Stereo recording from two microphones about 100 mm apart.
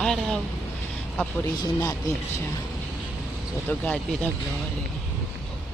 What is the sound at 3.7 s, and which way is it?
Speech, 15° left (ahead or behind).